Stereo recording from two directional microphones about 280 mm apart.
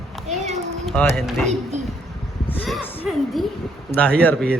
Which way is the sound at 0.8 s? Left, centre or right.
Centre.